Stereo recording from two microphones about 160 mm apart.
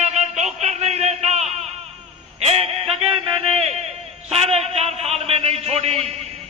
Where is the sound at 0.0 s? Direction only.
45° right (ahead or behind).